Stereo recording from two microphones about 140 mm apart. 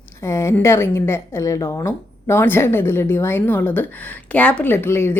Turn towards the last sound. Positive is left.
turn(degrees=20)  # may be behind; listen again after turning